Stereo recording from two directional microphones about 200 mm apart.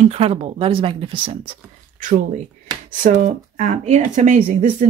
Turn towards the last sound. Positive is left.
turn(degrees=-35)  # may be behind; listen again after turning